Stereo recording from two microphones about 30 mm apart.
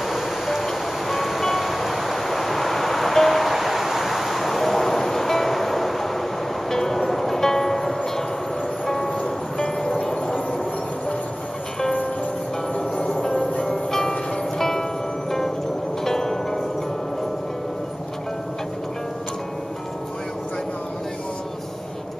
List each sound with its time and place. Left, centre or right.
0.0 s music: centre
9.0 s music: left
9.9 s music: centre
13.6 s music: centre
16.0 s music: centre